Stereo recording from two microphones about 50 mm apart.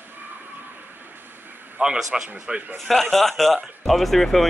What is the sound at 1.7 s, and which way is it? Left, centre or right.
Speech, centre.